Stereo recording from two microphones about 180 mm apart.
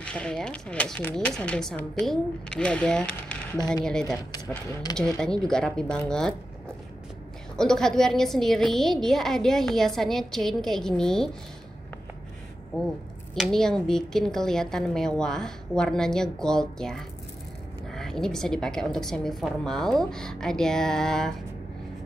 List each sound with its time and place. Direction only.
0.0 s a woman's voice: 5° left (ahead or behind)
4.3 s speech: 20° left (ahead or behind)
4.9 s a woman's voice: 5° left (ahead or behind)
7.5 s a woman's voice: 5° left (ahead or behind)
12.7 s a woman's voice: 5° left (ahead or behind)